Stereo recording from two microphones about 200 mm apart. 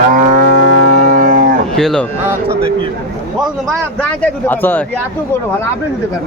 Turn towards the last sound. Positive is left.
turn(degrees=10)  # may be behind; listen again after turning